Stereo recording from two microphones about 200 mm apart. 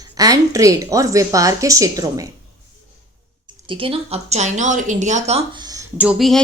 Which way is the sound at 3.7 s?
25° right (ahead or behind).